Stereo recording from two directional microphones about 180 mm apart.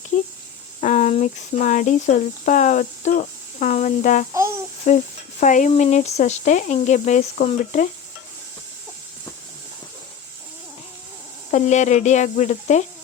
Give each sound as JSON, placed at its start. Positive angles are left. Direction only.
{"t": 0.8, "sound": "speech", "side_deg": 40}
{"t": 11.5, "sound": "speech", "side_deg": 40}